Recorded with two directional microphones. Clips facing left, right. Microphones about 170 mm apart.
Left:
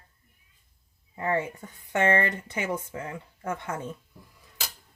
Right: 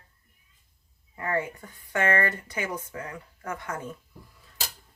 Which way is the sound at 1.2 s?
25° left (ahead or behind).